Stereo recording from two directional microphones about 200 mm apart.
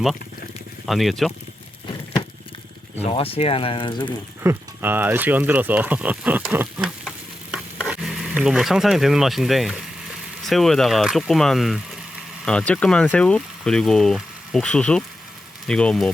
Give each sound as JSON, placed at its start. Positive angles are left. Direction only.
{"t": 0.9, "sound": "speech", "side_deg": 0}
{"t": 3.0, "sound": "speech", "side_deg": 30}
{"t": 4.4, "sound": "speech", "side_deg": -10}